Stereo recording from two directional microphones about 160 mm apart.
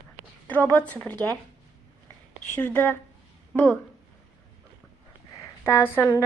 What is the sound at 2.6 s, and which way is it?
A woman's voice, 10° left (ahead or behind).